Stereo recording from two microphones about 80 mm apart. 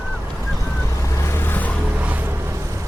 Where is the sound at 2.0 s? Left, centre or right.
Right.